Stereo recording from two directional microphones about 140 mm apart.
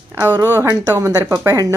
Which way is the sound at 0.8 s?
25° right (ahead or behind).